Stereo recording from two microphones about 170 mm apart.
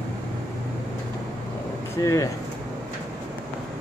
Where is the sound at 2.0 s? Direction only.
20° left (ahead or behind).